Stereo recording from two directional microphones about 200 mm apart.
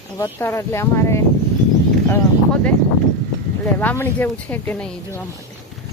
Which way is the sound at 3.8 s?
10° left (ahead or behind).